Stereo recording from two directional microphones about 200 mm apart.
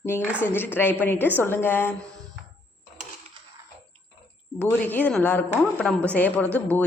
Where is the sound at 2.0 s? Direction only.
15° right (ahead or behind).